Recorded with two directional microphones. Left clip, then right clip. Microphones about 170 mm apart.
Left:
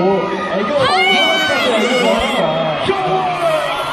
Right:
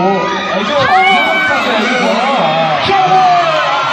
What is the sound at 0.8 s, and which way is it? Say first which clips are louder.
Speech: right 5 dB; 55° right (ahead or behind).